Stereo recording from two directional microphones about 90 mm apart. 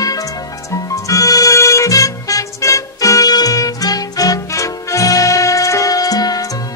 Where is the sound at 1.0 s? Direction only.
40° left (ahead or behind).